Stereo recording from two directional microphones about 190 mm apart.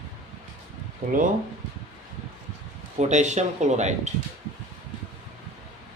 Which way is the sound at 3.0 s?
40° right (ahead or behind).